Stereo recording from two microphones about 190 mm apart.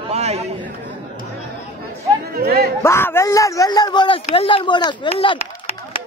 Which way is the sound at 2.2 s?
50° right (ahead or behind).